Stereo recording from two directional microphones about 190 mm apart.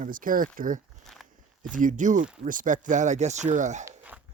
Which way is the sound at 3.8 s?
10° right (ahead or behind).